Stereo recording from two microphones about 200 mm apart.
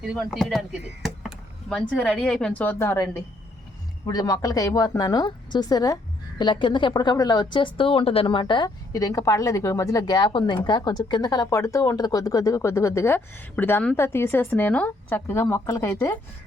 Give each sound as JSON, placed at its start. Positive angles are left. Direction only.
{"t": 0.0, "sound": "speech", "side_deg": 0}
{"t": 2.0, "sound": "a woman's voice", "side_deg": 5}